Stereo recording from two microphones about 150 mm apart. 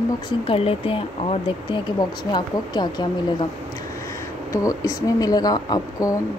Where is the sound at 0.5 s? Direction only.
40° left (ahead or behind).